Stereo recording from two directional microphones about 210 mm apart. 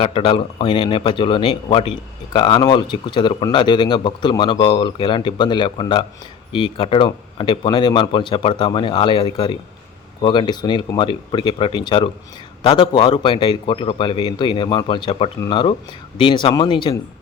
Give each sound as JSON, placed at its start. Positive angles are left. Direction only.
{"t": 0.0, "sound": "speech", "side_deg": 25}